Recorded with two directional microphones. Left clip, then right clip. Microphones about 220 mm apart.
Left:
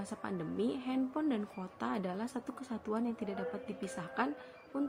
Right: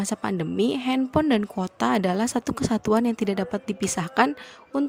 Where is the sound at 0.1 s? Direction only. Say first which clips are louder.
Right 11 dB; 50° right (ahead or behind).